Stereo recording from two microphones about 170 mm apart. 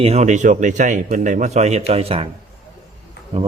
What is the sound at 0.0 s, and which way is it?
A man's voice, 40° right (ahead or behind).